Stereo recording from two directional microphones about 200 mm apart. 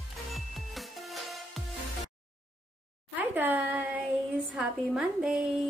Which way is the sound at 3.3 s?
10° right (ahead or behind).